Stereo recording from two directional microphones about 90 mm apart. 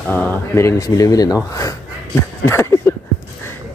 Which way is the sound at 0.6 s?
35° left (ahead or behind).